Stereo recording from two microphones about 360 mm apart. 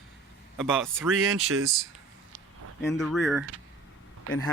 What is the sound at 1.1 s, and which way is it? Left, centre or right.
Speech, right.